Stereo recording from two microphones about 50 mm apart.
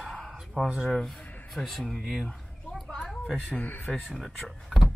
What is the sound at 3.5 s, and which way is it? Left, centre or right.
Speech, left.